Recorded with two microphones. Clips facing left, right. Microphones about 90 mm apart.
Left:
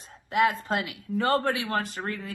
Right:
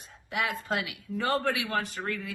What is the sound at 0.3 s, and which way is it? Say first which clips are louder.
A woman's voice: left 7 dB; 35° left (ahead or behind).